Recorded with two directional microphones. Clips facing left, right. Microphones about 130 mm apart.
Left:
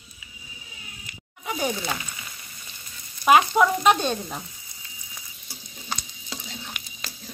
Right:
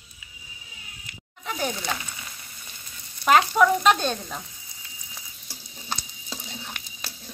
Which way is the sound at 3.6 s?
10° left (ahead or behind).